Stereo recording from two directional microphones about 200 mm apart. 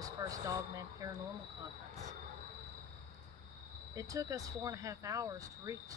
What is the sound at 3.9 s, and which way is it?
Speech, 15° right (ahead or behind).